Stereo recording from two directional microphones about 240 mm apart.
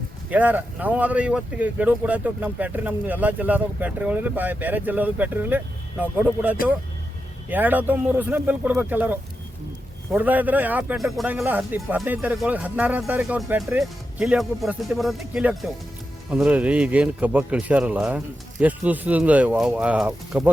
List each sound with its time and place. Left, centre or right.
0.3 s a man's voice: centre